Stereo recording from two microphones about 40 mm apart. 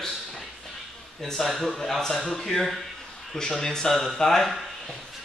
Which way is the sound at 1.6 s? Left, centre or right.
Centre.